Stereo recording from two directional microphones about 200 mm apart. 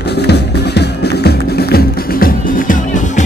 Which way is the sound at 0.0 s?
55° left (ahead or behind).